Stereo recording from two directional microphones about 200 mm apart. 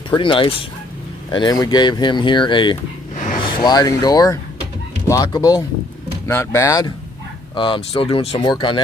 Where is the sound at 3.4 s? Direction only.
20° left (ahead or behind).